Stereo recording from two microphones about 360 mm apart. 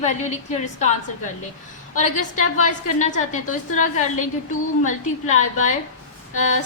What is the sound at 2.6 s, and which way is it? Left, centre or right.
A woman's voice, centre.